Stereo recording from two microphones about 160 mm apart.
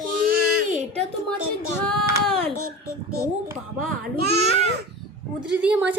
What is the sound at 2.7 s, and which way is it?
Speech, 75° right (ahead or behind).